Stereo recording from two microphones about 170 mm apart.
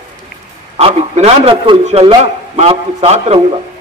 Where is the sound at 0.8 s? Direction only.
35° right (ahead or behind).